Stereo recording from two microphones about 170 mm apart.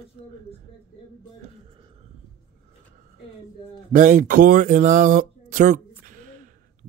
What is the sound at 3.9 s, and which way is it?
Speech, 50° right (ahead or behind).